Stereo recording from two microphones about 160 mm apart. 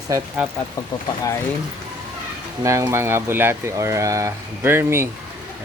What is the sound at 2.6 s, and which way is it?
Speech, 20° right (ahead or behind).